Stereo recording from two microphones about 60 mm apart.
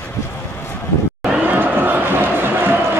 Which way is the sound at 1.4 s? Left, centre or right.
Right.